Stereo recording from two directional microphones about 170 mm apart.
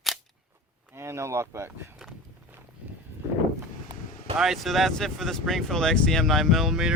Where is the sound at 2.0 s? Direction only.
Centre (ahead or behind).